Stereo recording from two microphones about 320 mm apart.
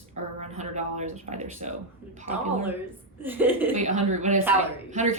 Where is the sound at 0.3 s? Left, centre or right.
Right.